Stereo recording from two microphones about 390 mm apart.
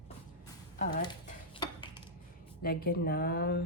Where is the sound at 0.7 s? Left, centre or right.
Centre.